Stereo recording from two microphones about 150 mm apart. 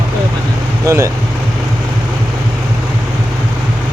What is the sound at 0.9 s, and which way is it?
Speech, 20° right (ahead or behind).